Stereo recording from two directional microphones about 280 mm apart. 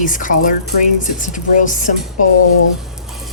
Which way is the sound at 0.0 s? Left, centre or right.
Left.